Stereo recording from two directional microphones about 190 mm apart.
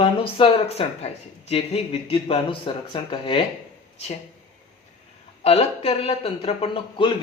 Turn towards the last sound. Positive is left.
turn(degrees=30)  # may be behind; listen again after turning